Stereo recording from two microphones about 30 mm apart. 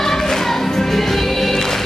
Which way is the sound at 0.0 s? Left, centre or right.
Centre.